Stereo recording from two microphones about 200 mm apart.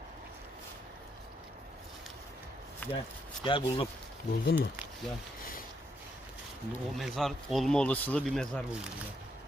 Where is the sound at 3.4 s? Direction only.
25° left (ahead or behind).